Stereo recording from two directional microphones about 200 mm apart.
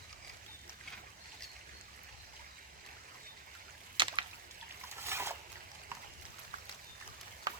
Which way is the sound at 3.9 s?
25° right (ahead or behind).